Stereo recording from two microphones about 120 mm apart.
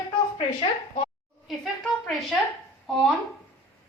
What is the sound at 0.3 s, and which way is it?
Speech, 60° left (ahead or behind).